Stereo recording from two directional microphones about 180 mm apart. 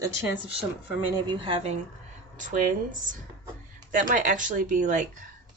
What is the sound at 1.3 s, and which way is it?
Speech, 30° right (ahead or behind).